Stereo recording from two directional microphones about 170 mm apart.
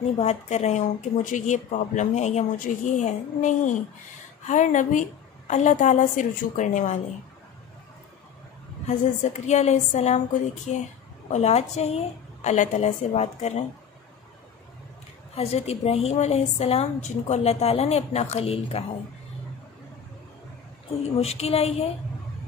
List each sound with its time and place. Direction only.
0.2 s speech: 40° left (ahead or behind)
8.8 s a woman's voice: 45° left (ahead or behind)
15.3 s a woman's voice: 40° left (ahead or behind)
21.2 s a woman's voice: 35° left (ahead or behind)